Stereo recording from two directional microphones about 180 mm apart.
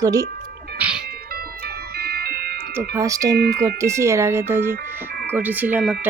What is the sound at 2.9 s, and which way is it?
Speech, 20° right (ahead or behind).